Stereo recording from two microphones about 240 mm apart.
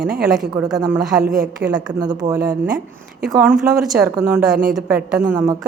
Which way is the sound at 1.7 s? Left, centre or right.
Centre.